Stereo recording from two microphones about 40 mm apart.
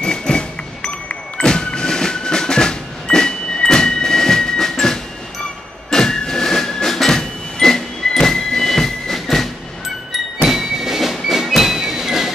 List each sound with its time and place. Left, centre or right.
0.0 s a sound: centre
1.4 s music: centre
5.9 s a sound: centre
7.1 s vehicle: centre
8.2 s music: centre
10.1 s music: centre